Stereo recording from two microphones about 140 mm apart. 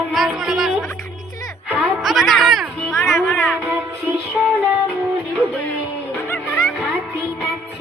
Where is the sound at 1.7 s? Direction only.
5° right (ahead or behind).